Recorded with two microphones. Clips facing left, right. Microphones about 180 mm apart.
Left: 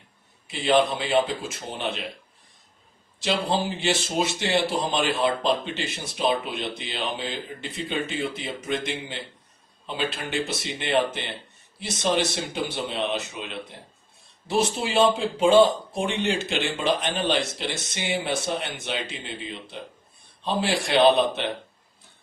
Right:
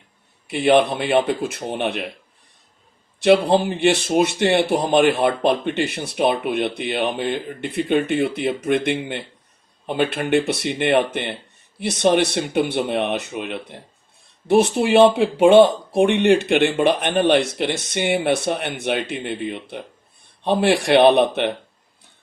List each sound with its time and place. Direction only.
0.5 s speech: 65° right (ahead or behind)
3.2 s speech: 60° right (ahead or behind)